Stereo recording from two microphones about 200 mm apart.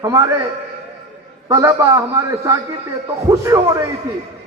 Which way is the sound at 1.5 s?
15° right (ahead or behind).